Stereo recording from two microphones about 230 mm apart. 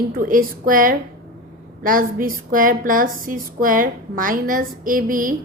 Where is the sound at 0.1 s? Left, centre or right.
Right.